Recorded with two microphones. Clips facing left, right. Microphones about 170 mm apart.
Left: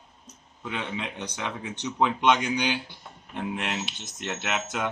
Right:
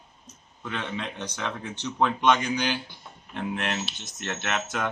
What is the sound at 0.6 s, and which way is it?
Speech, 15° left (ahead or behind).